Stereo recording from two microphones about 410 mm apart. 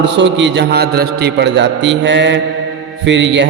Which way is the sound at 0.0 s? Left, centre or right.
Right.